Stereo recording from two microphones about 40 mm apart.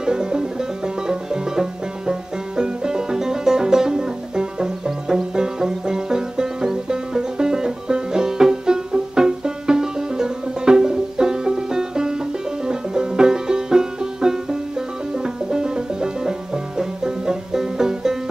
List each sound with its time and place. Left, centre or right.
0.0 s music: centre